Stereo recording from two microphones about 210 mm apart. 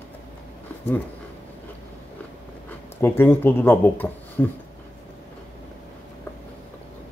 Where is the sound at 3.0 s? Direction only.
10° left (ahead or behind).